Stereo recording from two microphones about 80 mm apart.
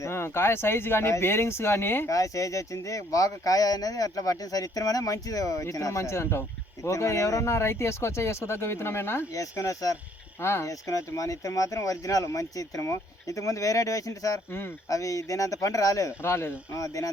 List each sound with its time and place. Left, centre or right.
0.0 s speech: left
2.0 s speech: left
9.3 s speech: left
10.4 s speech: left
10.7 s speech: left
16.2 s speech: left
16.7 s speech: left